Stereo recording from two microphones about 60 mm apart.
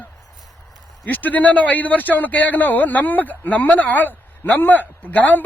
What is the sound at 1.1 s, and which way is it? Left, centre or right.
Speech, left.